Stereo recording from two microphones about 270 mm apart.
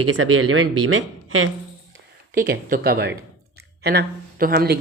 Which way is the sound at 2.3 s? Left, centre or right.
Right.